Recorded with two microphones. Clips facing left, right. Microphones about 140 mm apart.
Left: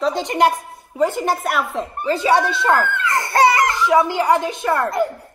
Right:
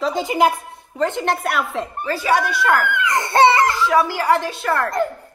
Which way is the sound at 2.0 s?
20° left (ahead or behind).